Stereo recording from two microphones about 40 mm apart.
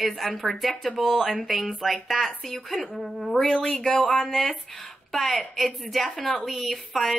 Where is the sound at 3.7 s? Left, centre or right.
Centre.